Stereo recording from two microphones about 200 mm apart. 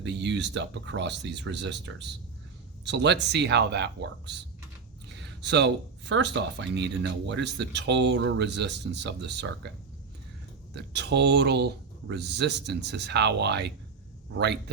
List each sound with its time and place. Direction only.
0.0 s speech: 60° right (ahead or behind)
10.8 s speech: 60° right (ahead or behind)